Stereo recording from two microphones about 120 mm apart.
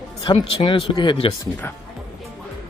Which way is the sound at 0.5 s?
45° left (ahead or behind).